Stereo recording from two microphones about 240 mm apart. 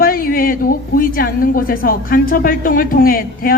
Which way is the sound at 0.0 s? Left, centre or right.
Left.